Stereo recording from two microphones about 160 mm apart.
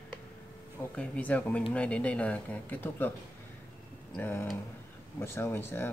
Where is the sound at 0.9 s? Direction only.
10° left (ahead or behind).